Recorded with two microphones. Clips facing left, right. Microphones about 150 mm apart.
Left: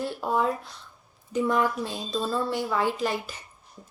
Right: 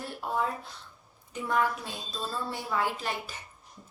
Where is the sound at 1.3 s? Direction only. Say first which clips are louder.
Left 5 dB; 90° left.